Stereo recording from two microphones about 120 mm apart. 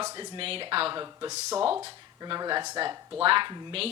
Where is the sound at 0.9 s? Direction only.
35° right (ahead or behind).